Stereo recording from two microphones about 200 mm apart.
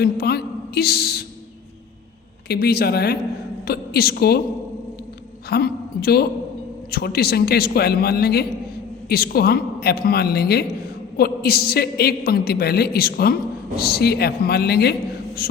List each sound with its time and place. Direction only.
0.0 s a woman's voice: 50° left (ahead or behind)
2.5 s a woman's voice: 50° left (ahead or behind)
5.5 s a woman's voice: 50° left (ahead or behind)